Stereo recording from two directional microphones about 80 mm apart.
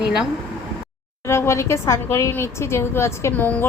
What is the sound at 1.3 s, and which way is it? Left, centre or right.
A woman's voice, left.